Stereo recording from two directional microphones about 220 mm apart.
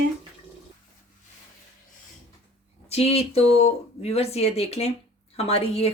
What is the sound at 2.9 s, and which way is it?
Speech, 25° left (ahead or behind).